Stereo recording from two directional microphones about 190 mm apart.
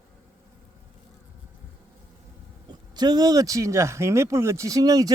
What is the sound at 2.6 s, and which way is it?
Speech, 20° right (ahead or behind).